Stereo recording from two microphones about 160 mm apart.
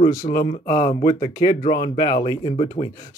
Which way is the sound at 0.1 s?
20° left (ahead or behind).